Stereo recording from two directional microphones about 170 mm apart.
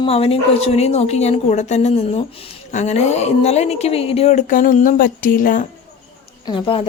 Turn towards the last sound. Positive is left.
turn(degrees=30)  # may be behind; listen again after turning